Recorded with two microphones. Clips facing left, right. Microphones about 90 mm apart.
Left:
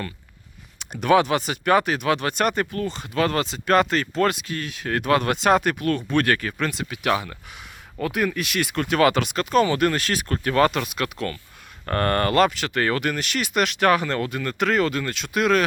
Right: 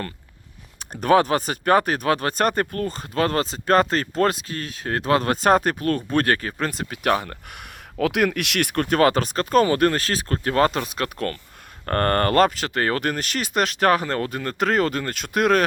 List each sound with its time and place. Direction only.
0.8 s speech: 40° right (ahead or behind)